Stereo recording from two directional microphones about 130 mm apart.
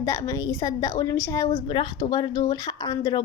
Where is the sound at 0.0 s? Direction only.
25° left (ahead or behind).